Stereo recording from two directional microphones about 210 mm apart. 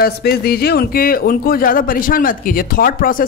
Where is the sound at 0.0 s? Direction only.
50° left (ahead or behind).